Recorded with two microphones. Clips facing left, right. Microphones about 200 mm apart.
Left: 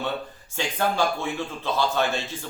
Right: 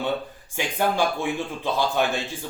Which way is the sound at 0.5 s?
15° right (ahead or behind).